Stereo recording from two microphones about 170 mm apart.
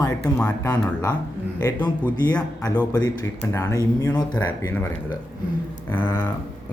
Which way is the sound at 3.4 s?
20° left (ahead or behind).